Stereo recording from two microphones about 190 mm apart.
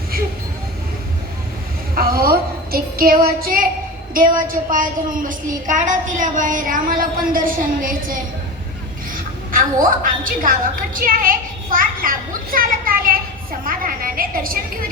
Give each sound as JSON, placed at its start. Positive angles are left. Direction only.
{"t": 2.0, "sound": "child singing", "side_deg": -50}
{"t": 4.1, "sound": "a woman's voice", "side_deg": -45}
{"t": 9.1, "sound": "a sound", "side_deg": -45}
{"t": 10.0, "sound": "a woman's voice", "side_deg": -45}